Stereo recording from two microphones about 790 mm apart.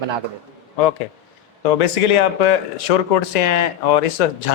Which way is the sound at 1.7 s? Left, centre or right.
Left.